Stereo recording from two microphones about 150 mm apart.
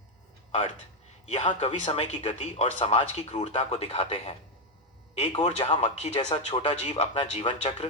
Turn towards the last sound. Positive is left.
turn(degrees=50)  # may be behind; listen again after turning